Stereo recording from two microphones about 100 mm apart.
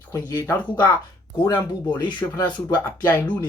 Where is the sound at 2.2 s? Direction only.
30° left (ahead or behind).